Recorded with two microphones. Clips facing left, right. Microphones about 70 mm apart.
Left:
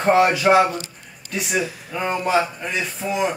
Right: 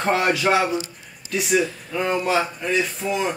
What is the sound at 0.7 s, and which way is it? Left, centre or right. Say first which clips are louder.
Speech: right 2 dB; left.